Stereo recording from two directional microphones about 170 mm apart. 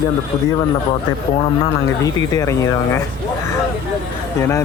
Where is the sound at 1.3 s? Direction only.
25° left (ahead or behind).